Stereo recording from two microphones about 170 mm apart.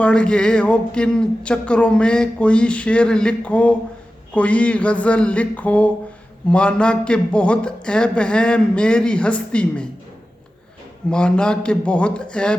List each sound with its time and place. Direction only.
0.0 s speech: 5° left (ahead or behind)
11.1 s speech: 5° left (ahead or behind)